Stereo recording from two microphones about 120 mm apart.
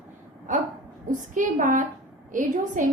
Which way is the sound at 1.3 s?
90° right.